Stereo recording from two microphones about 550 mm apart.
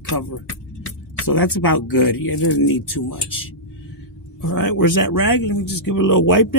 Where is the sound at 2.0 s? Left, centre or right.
Left.